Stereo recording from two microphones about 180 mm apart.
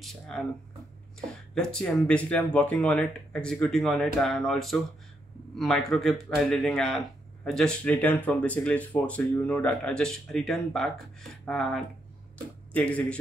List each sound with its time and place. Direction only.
0.3 s speech: 5° left (ahead or behind)
1.5 s speech: 5° left (ahead or behind)